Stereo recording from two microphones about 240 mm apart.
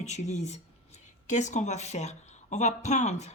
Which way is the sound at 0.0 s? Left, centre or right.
Left.